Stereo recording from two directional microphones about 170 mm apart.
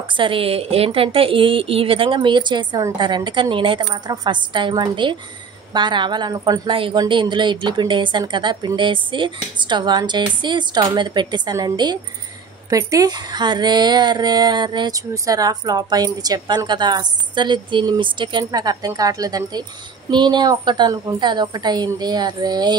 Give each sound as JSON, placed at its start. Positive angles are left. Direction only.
{"t": 0.2, "sound": "a woman's voice", "side_deg": -30}